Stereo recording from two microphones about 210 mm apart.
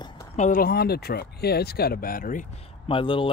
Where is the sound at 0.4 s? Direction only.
40° left (ahead or behind).